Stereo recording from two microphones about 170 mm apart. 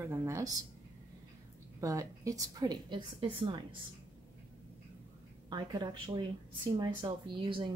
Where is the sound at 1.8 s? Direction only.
20° right (ahead or behind).